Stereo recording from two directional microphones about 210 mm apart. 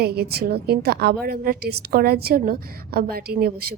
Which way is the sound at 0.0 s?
50° right (ahead or behind).